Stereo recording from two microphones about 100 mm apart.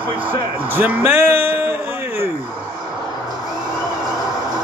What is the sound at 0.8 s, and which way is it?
Speech, 20° right (ahead or behind).